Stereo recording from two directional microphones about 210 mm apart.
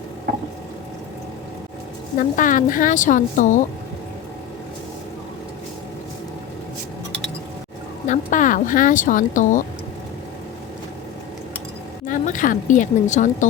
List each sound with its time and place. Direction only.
2.1 s a woman's voice: 40° left (ahead or behind)
8.0 s speech: 35° left (ahead or behind)
12.0 s a woman's voice: 40° left (ahead or behind)